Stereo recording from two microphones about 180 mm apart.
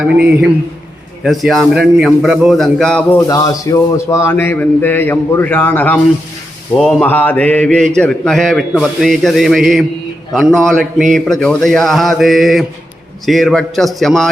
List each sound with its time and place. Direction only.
0.0 s a man's voice: 5° right (ahead or behind)
3.2 s a man's voice: 20° left (ahead or behind); by 14.3 s centre (ahead or behind)